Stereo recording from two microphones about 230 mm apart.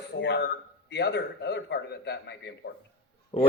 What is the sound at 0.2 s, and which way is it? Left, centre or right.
A man's voice, left.